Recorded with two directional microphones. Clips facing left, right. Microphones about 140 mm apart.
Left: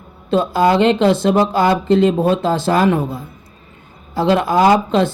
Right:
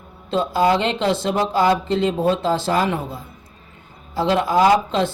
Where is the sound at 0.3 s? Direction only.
55° left (ahead or behind).